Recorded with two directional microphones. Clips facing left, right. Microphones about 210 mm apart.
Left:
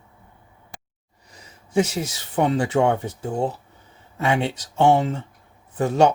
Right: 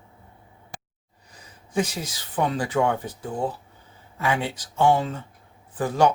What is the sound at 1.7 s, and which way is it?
Speech, 25° left (ahead or behind).